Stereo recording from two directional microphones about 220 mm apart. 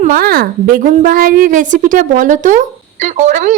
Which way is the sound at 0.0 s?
40° right (ahead or behind).